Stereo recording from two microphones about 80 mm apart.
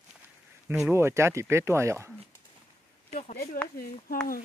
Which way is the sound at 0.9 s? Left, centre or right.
Right.